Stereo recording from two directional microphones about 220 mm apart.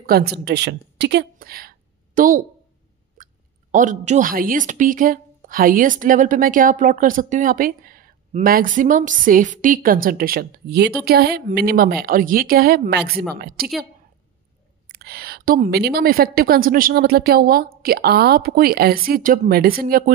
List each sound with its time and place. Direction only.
0.0 s a woman's voice: 45° right (ahead or behind)
3.7 s a woman's voice: 35° right (ahead or behind)
14.9 s a woman's voice: 45° right (ahead or behind)